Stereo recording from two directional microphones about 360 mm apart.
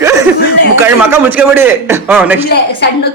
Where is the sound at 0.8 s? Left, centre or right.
Centre.